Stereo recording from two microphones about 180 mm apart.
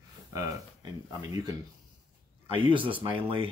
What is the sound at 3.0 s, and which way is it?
Speech, 30° right (ahead or behind).